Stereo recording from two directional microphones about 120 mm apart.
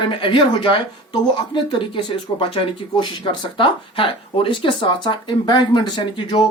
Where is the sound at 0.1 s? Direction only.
45° left (ahead or behind).